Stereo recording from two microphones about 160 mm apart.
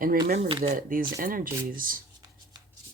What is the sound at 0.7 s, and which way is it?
Speech, 60° right (ahead or behind).